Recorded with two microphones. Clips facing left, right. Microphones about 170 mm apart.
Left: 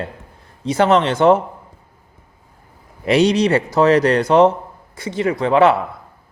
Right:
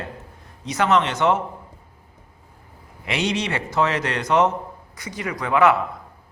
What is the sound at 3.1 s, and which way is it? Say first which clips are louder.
A man's voice: left 10 dB; 35° left (ahead or behind).